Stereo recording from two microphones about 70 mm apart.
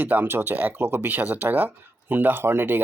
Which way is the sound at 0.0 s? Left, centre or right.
Right.